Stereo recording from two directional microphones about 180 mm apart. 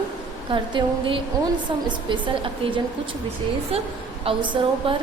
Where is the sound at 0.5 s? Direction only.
25° right (ahead or behind).